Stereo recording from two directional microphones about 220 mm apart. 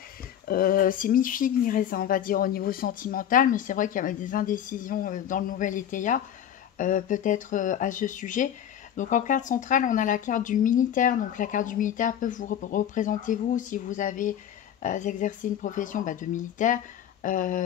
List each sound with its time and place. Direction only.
0.5 s speech: 40° left (ahead or behind)